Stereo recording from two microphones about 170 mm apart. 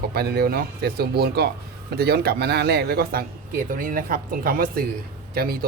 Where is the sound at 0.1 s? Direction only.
70° right (ahead or behind).